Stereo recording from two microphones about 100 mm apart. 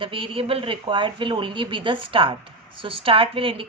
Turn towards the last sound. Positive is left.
turn(degrees=-65)  # may be behind; listen again after turning